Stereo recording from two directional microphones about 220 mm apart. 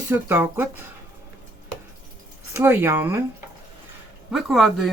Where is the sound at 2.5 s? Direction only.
10° right (ahead or behind).